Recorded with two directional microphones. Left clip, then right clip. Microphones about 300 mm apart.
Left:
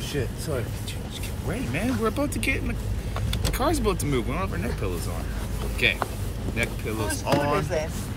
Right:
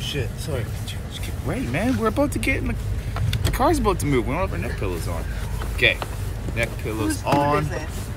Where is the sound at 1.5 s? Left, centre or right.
Centre.